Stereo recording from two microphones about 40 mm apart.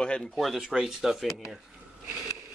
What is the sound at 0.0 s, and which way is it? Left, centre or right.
Speech, left.